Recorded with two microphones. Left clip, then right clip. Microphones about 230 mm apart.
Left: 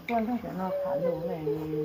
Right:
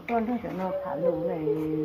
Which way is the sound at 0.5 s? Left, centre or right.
Left.